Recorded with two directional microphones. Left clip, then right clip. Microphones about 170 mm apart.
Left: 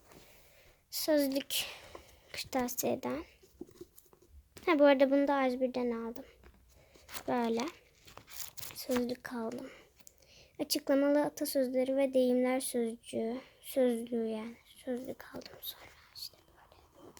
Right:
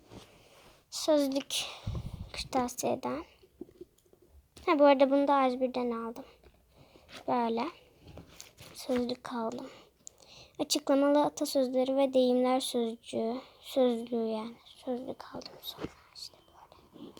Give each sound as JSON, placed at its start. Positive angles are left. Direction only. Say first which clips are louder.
{"t": 0.9, "sound": "speech", "louder": "right 3 dB", "side_deg": 25}
{"t": 4.6, "sound": "a woman's voice", "louder": "right 2 dB", "side_deg": 30}